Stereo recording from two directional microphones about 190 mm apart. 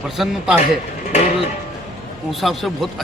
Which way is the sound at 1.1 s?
35° left (ahead or behind).